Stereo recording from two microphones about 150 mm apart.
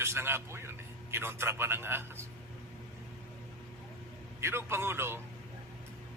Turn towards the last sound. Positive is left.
turn(degrees=-15)  # may be behind; listen again after turning